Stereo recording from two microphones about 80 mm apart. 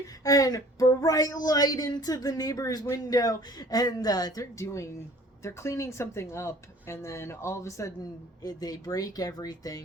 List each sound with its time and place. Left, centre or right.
0.3 s speech: left
4.6 s speech: left
8.4 s speech: left